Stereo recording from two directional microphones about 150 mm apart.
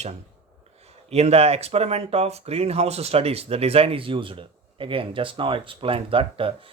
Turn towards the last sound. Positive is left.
turn(degrees=-35)  # may be behind; listen again after turning